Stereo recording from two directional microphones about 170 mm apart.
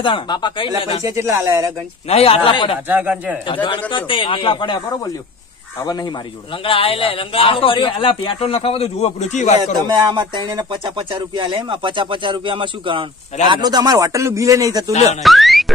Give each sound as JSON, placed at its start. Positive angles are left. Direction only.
{"t": 0.0, "sound": "speech", "side_deg": 25}
{"t": 1.0, "sound": "speech", "side_deg": -15}
{"t": 2.0, "sound": "speech", "side_deg": 35}
{"t": 2.9, "sound": "speech", "side_deg": -10}
{"t": 3.9, "sound": "speech", "side_deg": 30}
{"t": 6.6, "sound": "speech", "side_deg": 30}
{"t": 9.8, "sound": "speech", "side_deg": -25}
{"t": 15.2, "sound": "a sound", "side_deg": 0}